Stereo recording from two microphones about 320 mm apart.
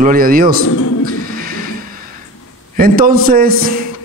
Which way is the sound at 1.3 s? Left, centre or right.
Right.